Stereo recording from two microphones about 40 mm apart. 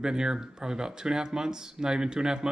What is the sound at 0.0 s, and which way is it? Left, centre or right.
Speech, centre.